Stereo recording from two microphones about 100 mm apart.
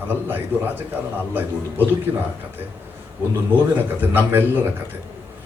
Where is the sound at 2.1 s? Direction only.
15° right (ahead or behind).